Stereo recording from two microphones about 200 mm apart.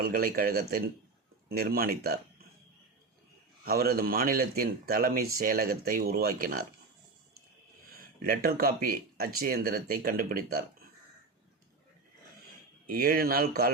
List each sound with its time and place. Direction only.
0.0 s speech: 45° right (ahead or behind)
3.7 s speech: 50° right (ahead or behind)
8.2 s speech: 45° right (ahead or behind)
12.9 s speech: 45° right (ahead or behind)